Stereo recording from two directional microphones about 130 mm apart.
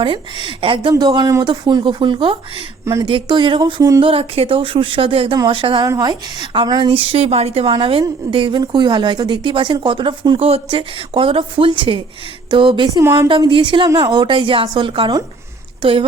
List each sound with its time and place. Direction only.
0.0 s a woman's voice: 40° right (ahead or behind)
4.0 s a woman's voice: 45° right (ahead or behind)
5.8 s a woman's voice: 30° right (ahead or behind)
13.8 s a woman's voice: 30° right (ahead or behind); by 16.0 s 45° right (ahead or behind)